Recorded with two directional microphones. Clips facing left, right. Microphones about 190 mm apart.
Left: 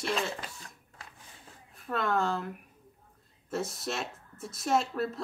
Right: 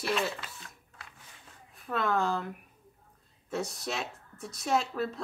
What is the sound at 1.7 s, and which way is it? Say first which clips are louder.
Speech: even; centre (ahead or behind).